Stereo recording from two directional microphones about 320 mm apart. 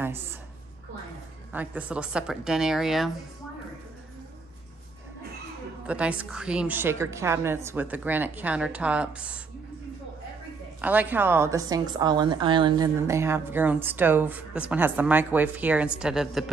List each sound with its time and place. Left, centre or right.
1.5 s a woman's voice: centre
5.9 s a woman's voice: centre
10.8 s a woman's voice: centre